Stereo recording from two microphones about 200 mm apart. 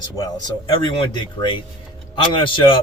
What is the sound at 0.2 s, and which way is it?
Speech, 20° left (ahead or behind).